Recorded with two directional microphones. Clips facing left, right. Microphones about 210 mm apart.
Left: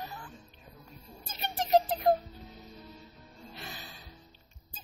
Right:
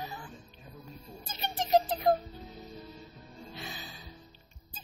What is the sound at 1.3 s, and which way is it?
Music, centre (ahead or behind).